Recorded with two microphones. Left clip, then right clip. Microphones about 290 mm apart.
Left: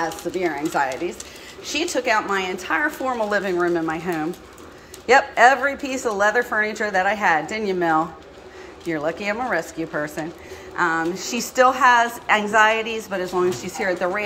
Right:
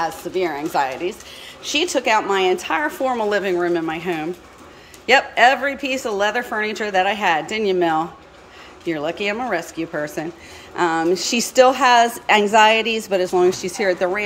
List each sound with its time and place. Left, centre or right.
0.0 s a woman's voice: centre
5.3 s a woman's voice: centre
5.9 s a woman's voice: centre